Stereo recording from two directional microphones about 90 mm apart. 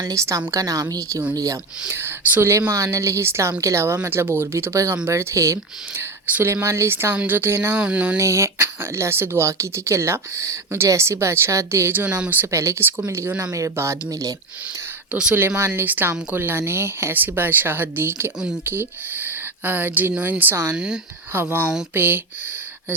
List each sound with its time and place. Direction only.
0.0 s speech: 35° right (ahead or behind)
1.9 s speech: 25° right (ahead or behind)
2.5 s speech: 35° right (ahead or behind)
6.2 s speech: 20° right (ahead or behind)
6.5 s a woman's voice: 30° right (ahead or behind)
7.8 s a sound: 15° right (ahead or behind)
8.2 s speech: 30° right (ahead or behind)
12.0 s a woman's voice: 15° right (ahead or behind)
12.5 s speech: 35° right (ahead or behind)
15.1 s a sound: 10° right (ahead or behind)
15.4 s a woman's voice: 30° right (ahead or behind)
20.7 s a sound: 10° right (ahead or behind)
21.9 s a woman's voice: 25° right (ahead or behind)